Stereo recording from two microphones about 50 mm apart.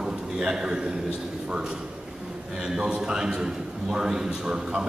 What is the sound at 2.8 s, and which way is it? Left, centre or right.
A man's voice, centre.